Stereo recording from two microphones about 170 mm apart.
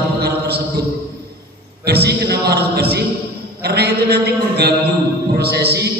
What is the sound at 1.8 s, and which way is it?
A man's voice, 75° right (ahead or behind).